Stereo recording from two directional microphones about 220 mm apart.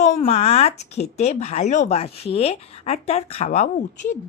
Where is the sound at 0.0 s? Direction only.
25° left (ahead or behind).